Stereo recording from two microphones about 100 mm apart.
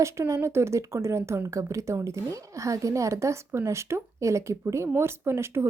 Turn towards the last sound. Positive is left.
turn(degrees=-25)  # may be behind; listen again after turning